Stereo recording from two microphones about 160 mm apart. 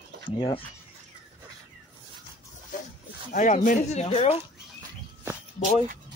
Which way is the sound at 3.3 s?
55° left (ahead or behind).